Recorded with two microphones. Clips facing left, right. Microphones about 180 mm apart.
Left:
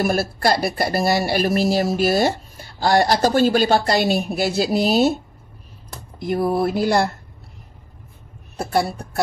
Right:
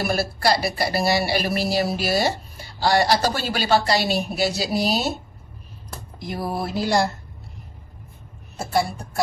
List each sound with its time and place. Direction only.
0.0 s speech: 50° left (ahead or behind)
6.1 s speech: 55° left (ahead or behind)